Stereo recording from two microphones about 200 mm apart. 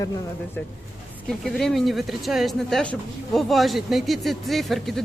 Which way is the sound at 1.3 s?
Centre (ahead or behind).